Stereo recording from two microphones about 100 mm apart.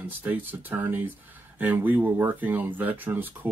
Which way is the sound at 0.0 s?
20° right (ahead or behind).